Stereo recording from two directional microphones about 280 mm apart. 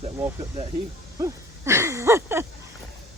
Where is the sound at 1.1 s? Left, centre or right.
Centre.